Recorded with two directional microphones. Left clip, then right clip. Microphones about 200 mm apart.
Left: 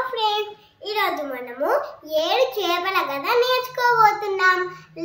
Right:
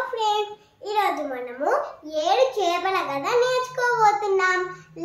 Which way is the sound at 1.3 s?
Centre (ahead or behind).